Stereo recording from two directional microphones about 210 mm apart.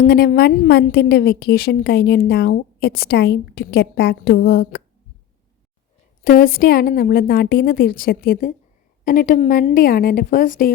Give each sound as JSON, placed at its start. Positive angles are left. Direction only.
{"t": 0.0, "sound": "a woman's voice", "side_deg": 45}
{"t": 6.2, "sound": "a woman's voice", "side_deg": 40}